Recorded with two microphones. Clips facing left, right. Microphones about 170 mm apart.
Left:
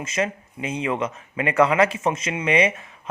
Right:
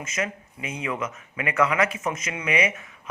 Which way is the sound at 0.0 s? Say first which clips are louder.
Left 5 dB; 30° left (ahead or behind).